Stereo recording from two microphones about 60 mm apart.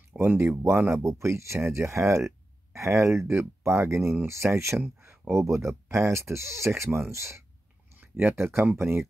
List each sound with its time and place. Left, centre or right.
0.1 s a sound: right
0.4 s speech: right
1.0 s speech: right